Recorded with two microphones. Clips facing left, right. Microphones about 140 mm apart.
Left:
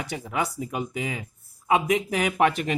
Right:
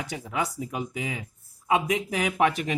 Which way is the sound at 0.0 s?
60° left (ahead or behind).